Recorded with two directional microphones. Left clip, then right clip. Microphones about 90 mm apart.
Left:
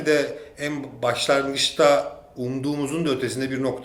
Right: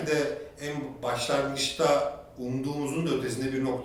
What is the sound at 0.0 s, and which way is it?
A man's voice, 45° left (ahead or behind).